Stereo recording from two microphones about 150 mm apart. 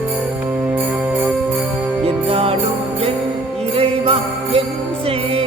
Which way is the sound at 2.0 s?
40° right (ahead or behind).